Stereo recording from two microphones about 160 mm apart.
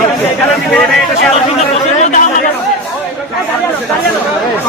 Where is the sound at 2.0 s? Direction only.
50° left (ahead or behind).